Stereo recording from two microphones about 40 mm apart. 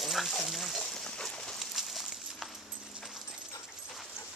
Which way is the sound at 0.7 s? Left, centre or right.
Centre.